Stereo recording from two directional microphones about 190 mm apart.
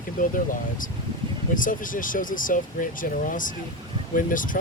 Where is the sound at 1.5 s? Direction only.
45° left (ahead or behind).